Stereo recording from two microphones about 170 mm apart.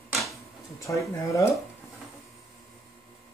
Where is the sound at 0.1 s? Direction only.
Centre (ahead or behind).